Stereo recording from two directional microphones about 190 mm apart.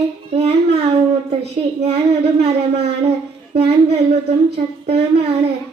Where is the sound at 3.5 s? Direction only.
30° right (ahead or behind).